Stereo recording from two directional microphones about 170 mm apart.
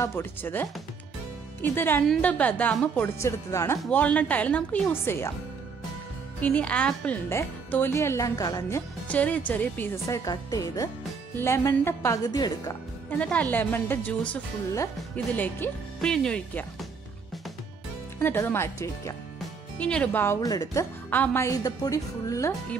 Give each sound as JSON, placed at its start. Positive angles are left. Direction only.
{"t": 0.0, "sound": "a woman's voice", "side_deg": 15}
{"t": 6.4, "sound": "a woman's voice", "side_deg": 10}
{"t": 13.2, "sound": "a woman's voice", "side_deg": 5}
{"t": 18.2, "sound": "a woman's voice", "side_deg": 15}
{"t": 20.3, "sound": "speech", "side_deg": 20}
{"t": 21.1, "sound": "a woman's voice", "side_deg": 10}